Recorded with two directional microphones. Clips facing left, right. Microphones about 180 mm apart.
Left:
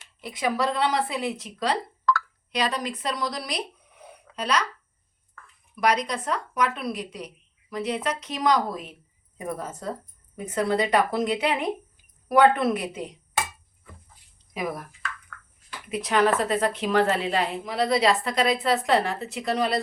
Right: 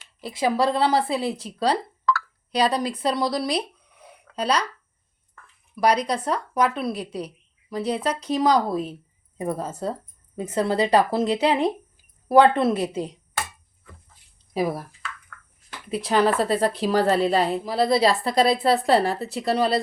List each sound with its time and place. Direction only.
0.2 s a woman's voice: 30° right (ahead or behind)
14.5 s a woman's voice: 30° right (ahead or behind)
15.9 s a woman's voice: 30° right (ahead or behind)